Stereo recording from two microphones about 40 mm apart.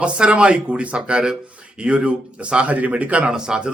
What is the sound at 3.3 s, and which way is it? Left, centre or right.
Speech, centre.